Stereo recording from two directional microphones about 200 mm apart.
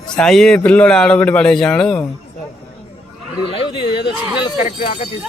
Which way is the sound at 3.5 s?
25° left (ahead or behind).